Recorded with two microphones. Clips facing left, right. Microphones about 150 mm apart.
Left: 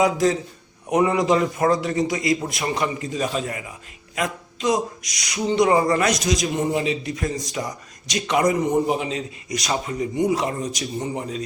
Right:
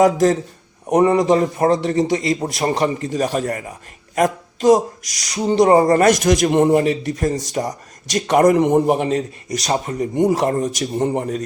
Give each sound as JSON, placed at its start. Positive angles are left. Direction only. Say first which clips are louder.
{"t": 0.0, "sound": "a man's voice", "louder": "right 5 dB", "side_deg": -45}
{"t": 7.1, "sound": "a man's voice", "louder": "right 6 dB", "side_deg": -40}
{"t": 8.5, "sound": "a man's voice", "louder": "right 6 dB", "side_deg": -65}